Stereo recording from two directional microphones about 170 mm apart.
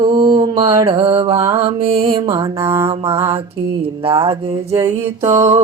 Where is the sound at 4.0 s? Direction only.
35° right (ahead or behind).